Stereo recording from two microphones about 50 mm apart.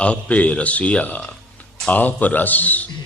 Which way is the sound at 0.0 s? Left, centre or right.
Left.